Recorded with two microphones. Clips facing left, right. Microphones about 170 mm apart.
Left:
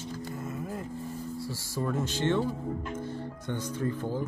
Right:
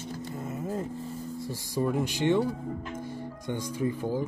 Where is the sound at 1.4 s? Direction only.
15° right (ahead or behind).